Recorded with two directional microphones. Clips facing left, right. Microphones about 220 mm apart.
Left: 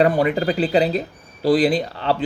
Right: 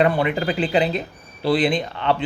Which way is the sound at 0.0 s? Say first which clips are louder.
Left 2 dB; 40° left (ahead or behind).